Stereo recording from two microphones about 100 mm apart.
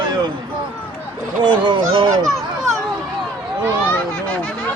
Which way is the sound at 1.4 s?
55° right (ahead or behind).